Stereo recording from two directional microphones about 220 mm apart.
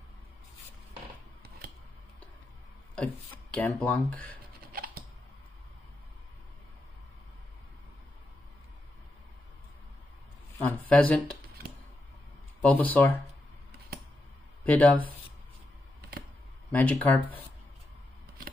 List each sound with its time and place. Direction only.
3.5 s speech: 5° left (ahead or behind)
4.7 s typing: 40° right (ahead or behind)
10.6 s speech: 10° left (ahead or behind)
12.6 s speech: 10° left (ahead or behind)
14.6 s a sound: 5° left (ahead or behind)
16.7 s speech: 5° left (ahead or behind)